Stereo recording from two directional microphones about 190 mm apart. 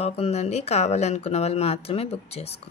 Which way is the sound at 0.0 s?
35° left (ahead or behind).